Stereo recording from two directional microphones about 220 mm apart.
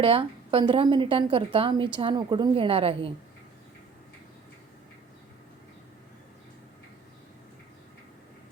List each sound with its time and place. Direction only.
0.0 s a woman's voice: 25° right (ahead or behind)